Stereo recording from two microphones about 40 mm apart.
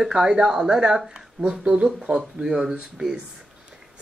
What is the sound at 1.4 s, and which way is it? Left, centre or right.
Speech, right.